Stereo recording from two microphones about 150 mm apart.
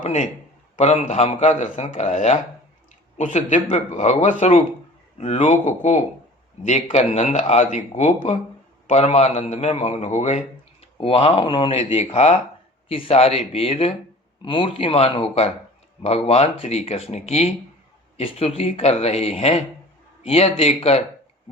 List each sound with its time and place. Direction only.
0.0 s a man's voice: 50° left (ahead or behind)
10.9 s a man's voice: 40° left (ahead or behind)